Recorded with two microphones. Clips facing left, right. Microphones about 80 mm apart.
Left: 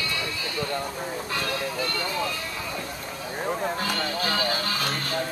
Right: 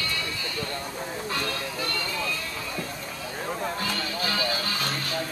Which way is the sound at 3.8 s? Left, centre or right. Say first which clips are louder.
Left 2 dB; left.